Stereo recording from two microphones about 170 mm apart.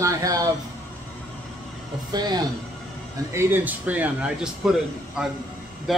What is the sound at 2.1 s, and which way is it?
Speech, 25° right (ahead or behind).